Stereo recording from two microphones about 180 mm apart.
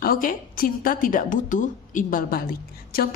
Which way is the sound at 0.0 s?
50° left (ahead or behind).